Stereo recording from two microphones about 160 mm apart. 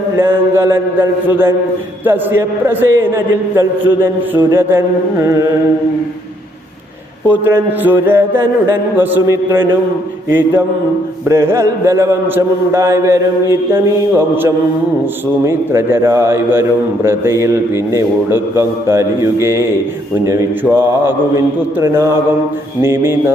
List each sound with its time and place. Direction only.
0.2 s a man's voice: 15° right (ahead or behind)
7.3 s a man's voice: 10° right (ahead or behind)
15.4 s a man's voice: 15° right (ahead or behind)